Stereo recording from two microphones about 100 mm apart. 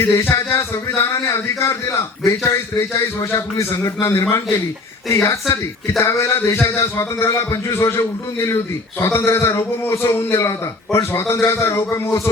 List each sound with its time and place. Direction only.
0.0 s a man's voice: 25° left (ahead or behind)